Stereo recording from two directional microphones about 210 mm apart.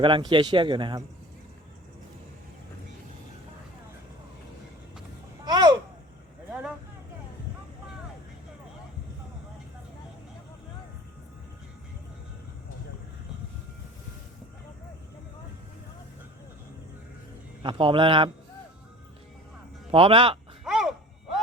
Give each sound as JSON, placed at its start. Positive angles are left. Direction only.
{"t": 0.0, "sound": "a man's voice", "side_deg": -20}
{"t": 5.5, "sound": "a sound", "side_deg": -20}
{"t": 6.5, "sound": "vehicle", "side_deg": -5}
{"t": 17.6, "sound": "a man's voice", "side_deg": -25}
{"t": 19.9, "sound": "a man's voice", "side_deg": -25}
{"t": 20.7, "sound": "a sound", "side_deg": 0}